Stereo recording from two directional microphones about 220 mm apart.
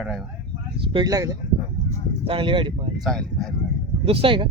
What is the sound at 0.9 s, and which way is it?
Speech, 15° right (ahead or behind).